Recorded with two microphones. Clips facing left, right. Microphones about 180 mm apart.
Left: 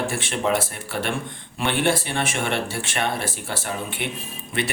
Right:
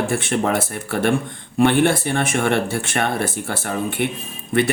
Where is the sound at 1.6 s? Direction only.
50° right (ahead or behind).